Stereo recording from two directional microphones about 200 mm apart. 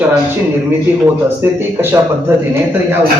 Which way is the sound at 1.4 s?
10° right (ahead or behind).